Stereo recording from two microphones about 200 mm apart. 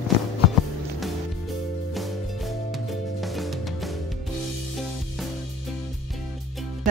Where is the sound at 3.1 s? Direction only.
Centre (ahead or behind).